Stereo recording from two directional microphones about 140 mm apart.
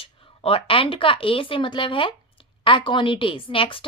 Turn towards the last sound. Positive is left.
turn(degrees=40)  # may be behind; listen again after turning